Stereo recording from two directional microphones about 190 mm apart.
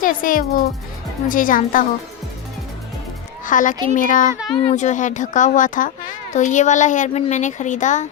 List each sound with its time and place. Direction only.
0.0 s speech: 45° left (ahead or behind)
3.4 s speech: 45° left (ahead or behind)